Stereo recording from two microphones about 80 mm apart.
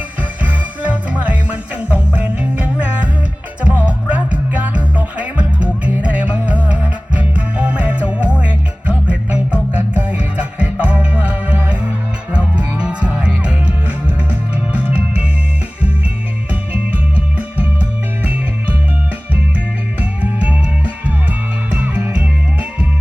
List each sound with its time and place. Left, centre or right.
0.2 s music: centre
16.5 s music: centre
20.0 s music: centre